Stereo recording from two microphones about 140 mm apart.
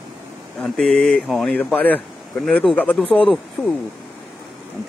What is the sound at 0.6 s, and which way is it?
Speech, 5° left (ahead or behind).